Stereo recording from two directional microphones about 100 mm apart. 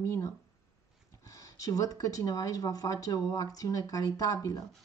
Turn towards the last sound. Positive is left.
turn(degrees=35)  # may be behind; listen again after turning